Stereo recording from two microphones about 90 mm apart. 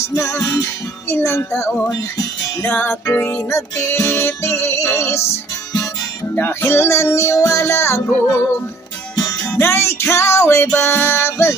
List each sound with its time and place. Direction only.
0.0 s music: 30° left (ahead or behind)
6.3 s music: 25° left (ahead or behind)
9.6 s music: 30° left (ahead or behind)